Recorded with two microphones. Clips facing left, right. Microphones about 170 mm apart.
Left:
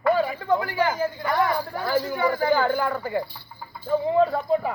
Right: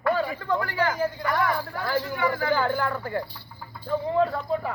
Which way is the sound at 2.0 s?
35° left (ahead or behind).